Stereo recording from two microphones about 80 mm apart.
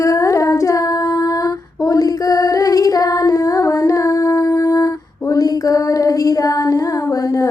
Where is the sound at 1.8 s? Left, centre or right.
Left.